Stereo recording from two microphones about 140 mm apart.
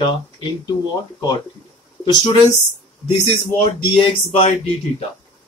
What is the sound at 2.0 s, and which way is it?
Speech, 30° left (ahead or behind).